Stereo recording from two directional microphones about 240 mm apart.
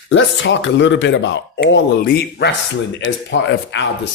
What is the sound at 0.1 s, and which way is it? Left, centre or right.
Speech, left.